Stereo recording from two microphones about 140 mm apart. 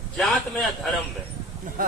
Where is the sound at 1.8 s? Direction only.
85° right.